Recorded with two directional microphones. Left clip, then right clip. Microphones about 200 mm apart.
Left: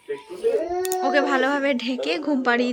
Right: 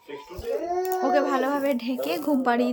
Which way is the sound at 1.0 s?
5° right (ahead or behind).